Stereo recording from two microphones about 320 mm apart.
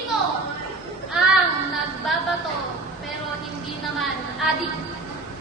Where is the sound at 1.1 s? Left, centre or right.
Centre.